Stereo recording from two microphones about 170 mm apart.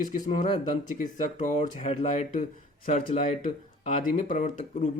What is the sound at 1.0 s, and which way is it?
Speech, 50° left (ahead or behind).